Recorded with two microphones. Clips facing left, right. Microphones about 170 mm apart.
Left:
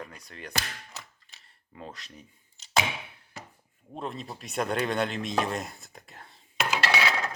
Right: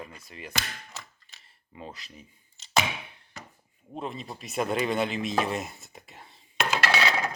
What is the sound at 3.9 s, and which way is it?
Speech, centre (ahead or behind).